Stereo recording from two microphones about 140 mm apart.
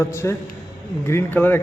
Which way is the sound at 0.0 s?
20° left (ahead or behind).